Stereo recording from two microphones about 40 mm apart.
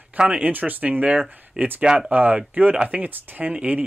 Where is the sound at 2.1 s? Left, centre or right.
Right.